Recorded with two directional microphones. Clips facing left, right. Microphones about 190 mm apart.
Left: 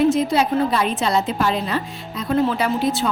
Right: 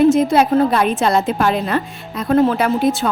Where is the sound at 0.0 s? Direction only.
50° right (ahead or behind).